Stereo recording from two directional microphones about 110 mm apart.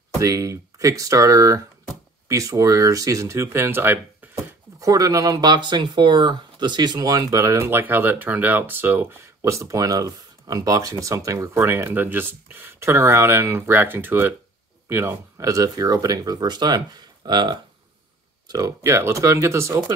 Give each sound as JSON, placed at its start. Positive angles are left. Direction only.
{"t": 0.2, "sound": "speech", "side_deg": -30}
{"t": 4.7, "sound": "speech", "side_deg": -30}
{"t": 18.5, "sound": "speech", "side_deg": -30}